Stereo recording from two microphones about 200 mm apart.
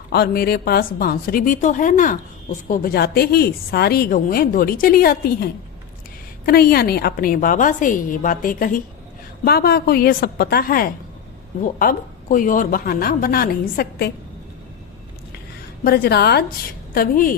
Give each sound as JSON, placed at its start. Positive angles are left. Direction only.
{"t": 0.1, "sound": "speech", "side_deg": 50}
{"t": 15.8, "sound": "speech", "side_deg": 50}